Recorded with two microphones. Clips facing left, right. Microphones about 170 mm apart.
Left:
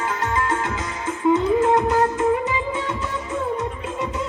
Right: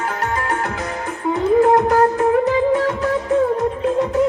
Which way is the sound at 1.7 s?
65° right (ahead or behind).